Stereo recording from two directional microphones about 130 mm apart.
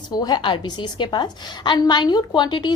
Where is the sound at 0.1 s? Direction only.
30° left (ahead or behind).